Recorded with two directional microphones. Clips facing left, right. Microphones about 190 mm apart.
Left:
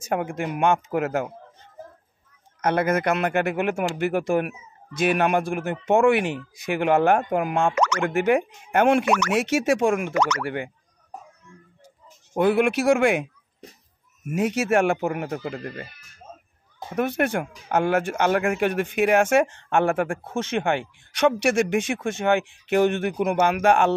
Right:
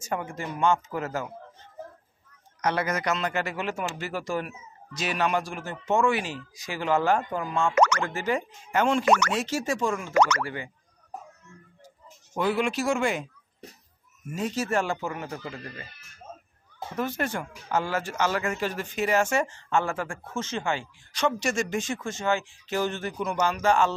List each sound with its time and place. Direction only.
0.1 s speech: 60° left (ahead or behind)
2.6 s speech: 55° left (ahead or behind)
7.7 s speech: 50° right (ahead or behind)
8.0 s speech: 60° left (ahead or behind)
10.1 s speech: 50° right (ahead or behind)
10.4 s speech: 60° left (ahead or behind)
12.4 s speech: 55° left (ahead or behind)
14.3 s speech: 70° left (ahead or behind); by 15.9 s 55° left (ahead or behind)
16.9 s speech: 60° left (ahead or behind)